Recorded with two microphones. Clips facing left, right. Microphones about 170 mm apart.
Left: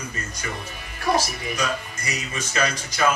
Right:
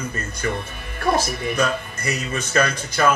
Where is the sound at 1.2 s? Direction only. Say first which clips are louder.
Right 5 dB; 55° right (ahead or behind).